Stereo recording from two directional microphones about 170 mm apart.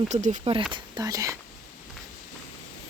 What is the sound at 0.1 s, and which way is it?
Speech, 45° right (ahead or behind).